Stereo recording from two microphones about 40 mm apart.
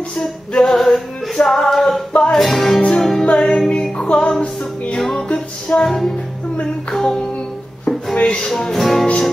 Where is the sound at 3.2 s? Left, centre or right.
Left.